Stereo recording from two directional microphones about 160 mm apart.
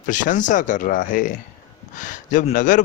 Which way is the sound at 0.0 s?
55° left (ahead or behind).